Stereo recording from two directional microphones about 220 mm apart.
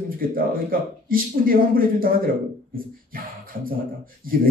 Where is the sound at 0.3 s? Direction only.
40° right (ahead or behind).